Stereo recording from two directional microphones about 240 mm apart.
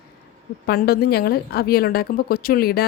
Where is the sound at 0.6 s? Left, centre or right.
Left.